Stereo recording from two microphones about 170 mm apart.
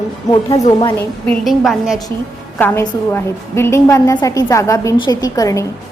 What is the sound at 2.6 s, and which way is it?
A woman's voice, 10° left (ahead or behind).